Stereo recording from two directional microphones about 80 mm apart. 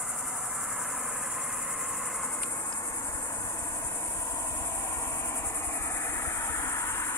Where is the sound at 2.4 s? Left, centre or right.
Left.